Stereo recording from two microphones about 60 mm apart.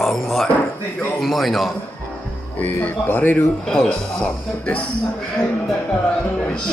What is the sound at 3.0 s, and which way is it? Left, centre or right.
Speech, left.